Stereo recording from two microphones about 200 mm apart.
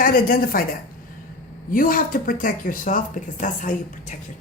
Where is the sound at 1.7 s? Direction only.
45° left (ahead or behind).